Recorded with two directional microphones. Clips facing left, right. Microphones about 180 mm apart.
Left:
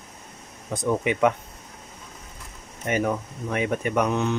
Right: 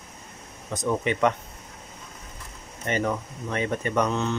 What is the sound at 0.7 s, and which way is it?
Speech, 10° left (ahead or behind).